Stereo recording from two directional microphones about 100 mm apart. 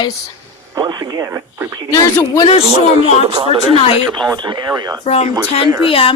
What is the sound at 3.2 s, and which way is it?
Speech, 70° right (ahead or behind).